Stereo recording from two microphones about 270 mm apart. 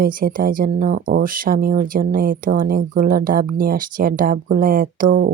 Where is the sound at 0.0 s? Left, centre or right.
Right.